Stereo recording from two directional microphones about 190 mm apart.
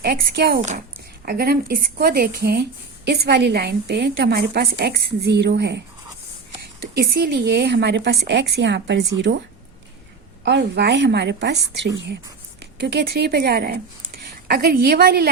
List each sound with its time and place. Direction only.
0.0 s a woman's voice: 55° right (ahead or behind)
6.9 s a woman's voice: 55° right (ahead or behind)
10.4 s a woman's voice: 65° right (ahead or behind)